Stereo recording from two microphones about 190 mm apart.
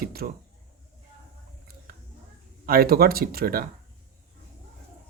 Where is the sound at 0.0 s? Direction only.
50° right (ahead or behind).